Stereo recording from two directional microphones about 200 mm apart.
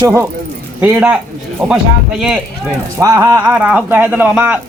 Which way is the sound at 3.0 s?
15° right (ahead or behind).